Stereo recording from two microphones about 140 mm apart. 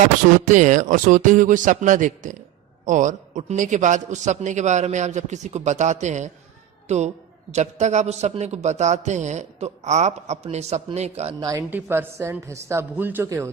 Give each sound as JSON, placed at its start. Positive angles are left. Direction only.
{"t": 0.0, "sound": "a man's voice", "side_deg": -60}
{"t": 11.3, "sound": "a man's voice", "side_deg": -25}